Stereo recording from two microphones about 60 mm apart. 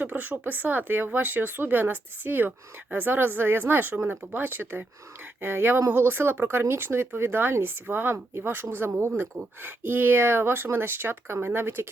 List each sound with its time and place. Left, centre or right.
0.0 s speech: right